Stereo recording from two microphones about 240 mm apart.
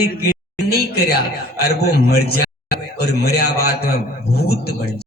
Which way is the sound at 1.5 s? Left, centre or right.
Left.